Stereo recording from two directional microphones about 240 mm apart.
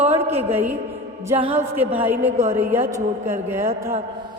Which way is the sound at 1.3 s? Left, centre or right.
Right.